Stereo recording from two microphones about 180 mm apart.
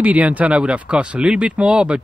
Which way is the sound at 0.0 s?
10° right (ahead or behind).